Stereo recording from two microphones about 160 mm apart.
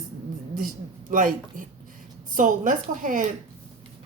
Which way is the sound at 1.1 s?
55° right (ahead or behind).